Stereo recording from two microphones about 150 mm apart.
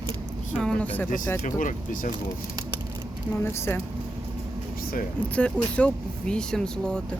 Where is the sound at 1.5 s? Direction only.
60° left (ahead or behind).